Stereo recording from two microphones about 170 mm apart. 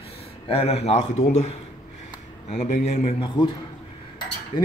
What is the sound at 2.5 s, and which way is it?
Speech, 40° left (ahead or behind).